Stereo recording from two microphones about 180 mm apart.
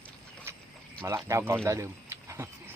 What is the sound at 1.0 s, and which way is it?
Speech, 15° right (ahead or behind).